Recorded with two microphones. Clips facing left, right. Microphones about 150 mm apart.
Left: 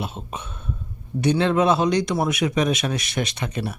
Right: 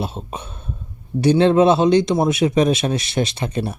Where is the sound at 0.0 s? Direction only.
35° right (ahead or behind).